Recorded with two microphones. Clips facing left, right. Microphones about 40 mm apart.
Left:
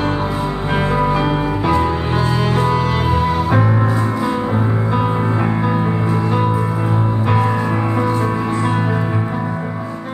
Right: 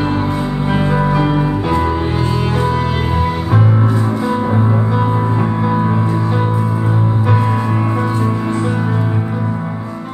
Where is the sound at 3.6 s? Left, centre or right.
Left.